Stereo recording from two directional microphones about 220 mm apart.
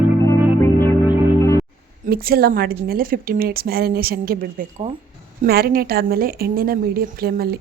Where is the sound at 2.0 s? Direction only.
45° right (ahead or behind).